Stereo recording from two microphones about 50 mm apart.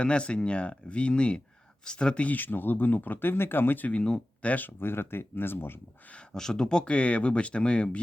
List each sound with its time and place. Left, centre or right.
0.0 s speech: left
2.2 s speech: left
4.4 s speech: left
4.8 s speech: left
6.3 s speech: centre